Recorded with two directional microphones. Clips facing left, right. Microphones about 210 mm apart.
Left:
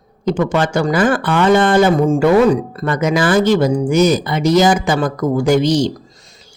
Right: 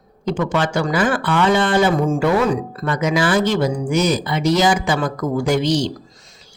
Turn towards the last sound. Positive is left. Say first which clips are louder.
# left 4 dB
turn(degrees=45)  # may be behind; listen again after turning